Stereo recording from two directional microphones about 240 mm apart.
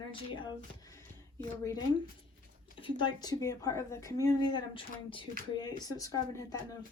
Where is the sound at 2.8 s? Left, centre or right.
Centre.